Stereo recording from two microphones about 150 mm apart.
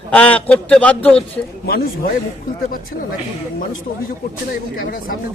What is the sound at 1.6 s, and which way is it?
Speech, 85° left.